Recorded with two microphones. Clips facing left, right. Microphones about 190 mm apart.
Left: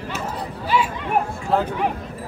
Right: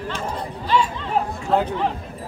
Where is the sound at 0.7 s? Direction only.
10° left (ahead or behind).